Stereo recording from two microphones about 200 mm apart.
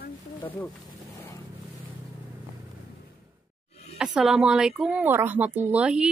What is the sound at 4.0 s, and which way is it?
Speech, 5° right (ahead or behind).